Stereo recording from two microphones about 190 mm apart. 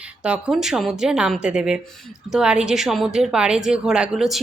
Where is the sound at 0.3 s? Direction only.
5° right (ahead or behind).